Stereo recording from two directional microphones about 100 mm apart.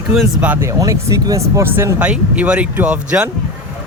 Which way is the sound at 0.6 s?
30° right (ahead or behind).